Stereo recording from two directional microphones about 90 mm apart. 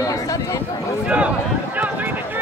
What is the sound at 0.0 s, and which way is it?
Chatter, 40° left (ahead or behind).